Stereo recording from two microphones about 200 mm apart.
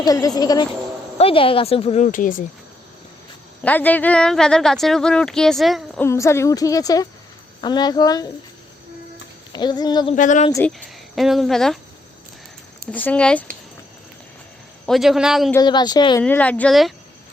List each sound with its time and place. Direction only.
0.0 s a woman's voice: 20° left (ahead or behind); by 2.4 s 40° left (ahead or behind)
3.6 s speech: 10° left (ahead or behind)
6.0 s a woman's voice: 15° left (ahead or behind)
9.5 s a woman's voice: 20° left (ahead or behind)
10.2 s speech: 40° left (ahead or behind)
10.7 s speech: centre (ahead or behind)
12.9 s a woman's voice: 10° left (ahead or behind)
14.8 s speech: centre (ahead or behind)
15.5 s a woman's voice: 20° left (ahead or behind)
16.2 s a woman's voice: 5° left (ahead or behind)